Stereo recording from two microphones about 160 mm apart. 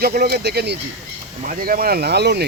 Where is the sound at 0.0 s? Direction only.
75° right (ahead or behind); by 0.8 s 90° right.